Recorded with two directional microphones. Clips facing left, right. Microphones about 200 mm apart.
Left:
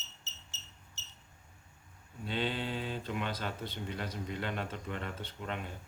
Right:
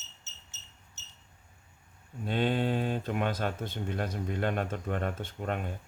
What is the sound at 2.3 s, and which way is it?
Speech, 50° right (ahead or behind).